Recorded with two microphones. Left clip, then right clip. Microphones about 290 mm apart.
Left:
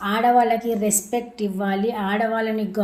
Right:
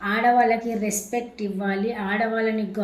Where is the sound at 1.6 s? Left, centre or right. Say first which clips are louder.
Left 3 dB; left.